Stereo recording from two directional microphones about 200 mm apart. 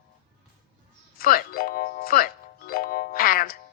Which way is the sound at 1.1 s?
45° left (ahead or behind).